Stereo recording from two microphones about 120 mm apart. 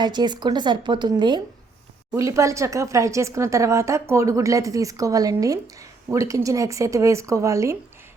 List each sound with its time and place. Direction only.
0.0 s speech: 35° right (ahead or behind)
2.1 s speech: 25° right (ahead or behind)